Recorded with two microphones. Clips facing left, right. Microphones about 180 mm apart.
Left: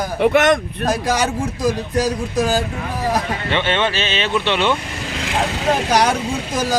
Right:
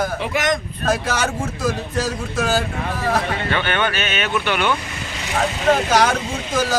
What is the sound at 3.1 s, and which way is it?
Speech, 25° left (ahead or behind).